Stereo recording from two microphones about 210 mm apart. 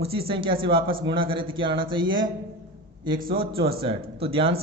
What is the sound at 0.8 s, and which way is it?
Speech, 45° right (ahead or behind).